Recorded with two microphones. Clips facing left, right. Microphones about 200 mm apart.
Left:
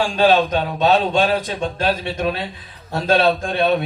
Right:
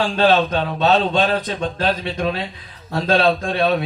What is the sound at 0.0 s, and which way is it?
A man's voice, 10° left (ahead or behind).